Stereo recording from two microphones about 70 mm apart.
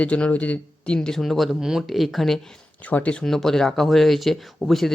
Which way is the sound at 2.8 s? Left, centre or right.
Left.